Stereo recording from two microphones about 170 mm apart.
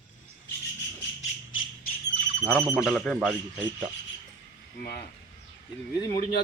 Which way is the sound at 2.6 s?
10° right (ahead or behind).